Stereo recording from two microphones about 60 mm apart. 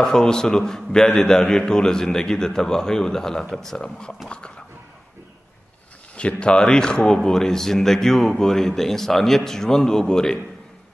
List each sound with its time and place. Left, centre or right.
0.0 s speech: centre
4.3 s dog: centre
6.1 s speech: centre